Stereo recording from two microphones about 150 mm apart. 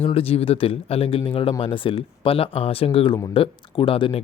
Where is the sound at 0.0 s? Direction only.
40° left (ahead or behind).